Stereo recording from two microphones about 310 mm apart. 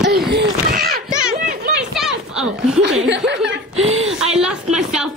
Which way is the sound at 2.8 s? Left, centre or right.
Right.